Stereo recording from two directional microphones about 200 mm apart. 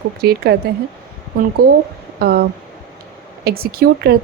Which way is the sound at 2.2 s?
50° right (ahead or behind).